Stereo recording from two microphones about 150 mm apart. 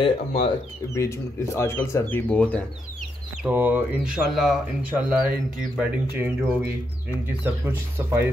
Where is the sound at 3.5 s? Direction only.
10° right (ahead or behind).